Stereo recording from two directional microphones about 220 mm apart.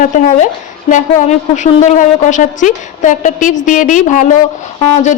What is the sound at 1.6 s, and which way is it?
Speech, 35° left (ahead or behind).